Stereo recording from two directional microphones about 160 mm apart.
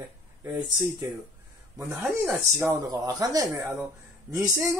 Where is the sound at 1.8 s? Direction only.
10° right (ahead or behind).